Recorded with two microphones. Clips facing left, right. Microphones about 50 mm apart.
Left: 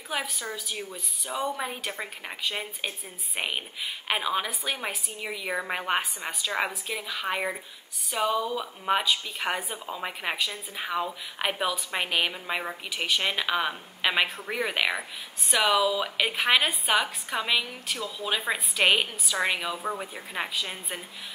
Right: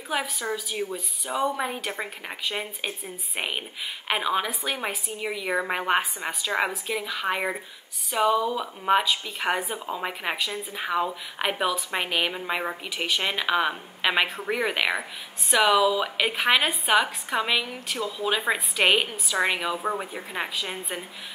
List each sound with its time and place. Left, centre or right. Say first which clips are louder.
0.1 s a woman's voice: right 4 dB; centre
19.7 s speech: right 4 dB; right
20.3 s a woman's voice: even; centre
20.6 s a woman's voice: right 3 dB; centre